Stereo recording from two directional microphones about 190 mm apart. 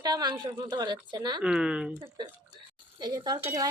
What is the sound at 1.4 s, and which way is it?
Speech, 5° right (ahead or behind).